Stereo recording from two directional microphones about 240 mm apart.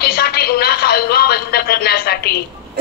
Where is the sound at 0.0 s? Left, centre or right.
Left.